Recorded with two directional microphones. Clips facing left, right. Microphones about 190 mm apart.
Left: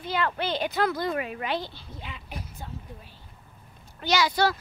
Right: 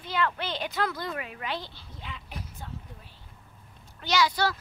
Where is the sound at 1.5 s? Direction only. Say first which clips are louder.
Left 5 dB; 10° left (ahead or behind).